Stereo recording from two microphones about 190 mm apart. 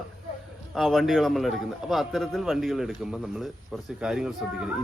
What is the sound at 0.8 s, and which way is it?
A man's voice, centre (ahead or behind).